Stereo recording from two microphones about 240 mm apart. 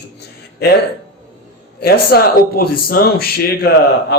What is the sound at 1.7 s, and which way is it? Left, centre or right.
Speech, left.